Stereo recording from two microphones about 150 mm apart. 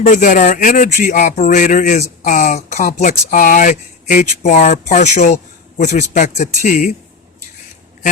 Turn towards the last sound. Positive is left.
turn(degrees=55)  # may be behind; listen again after turning